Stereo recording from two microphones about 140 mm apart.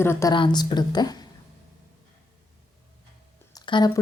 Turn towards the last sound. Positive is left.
turn(degrees=30)  # may be behind; listen again after turning